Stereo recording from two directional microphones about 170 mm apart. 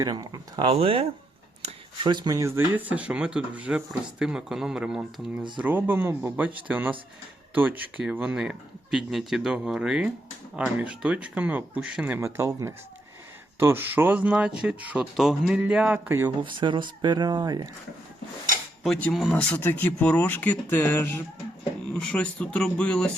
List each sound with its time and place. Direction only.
0.0 s speech: 20° right (ahead or behind)
0.7 s speech: 35° right (ahead or behind); by 16.3 s 15° right (ahead or behind)
16.4 s speech: 30° right (ahead or behind)
18.8 s speech: 5° left (ahead or behind)